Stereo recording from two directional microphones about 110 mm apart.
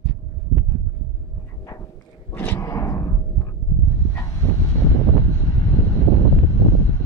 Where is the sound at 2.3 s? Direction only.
20° left (ahead or behind).